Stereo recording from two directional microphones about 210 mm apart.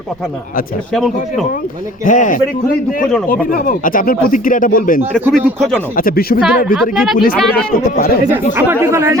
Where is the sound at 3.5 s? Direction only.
40° left (ahead or behind).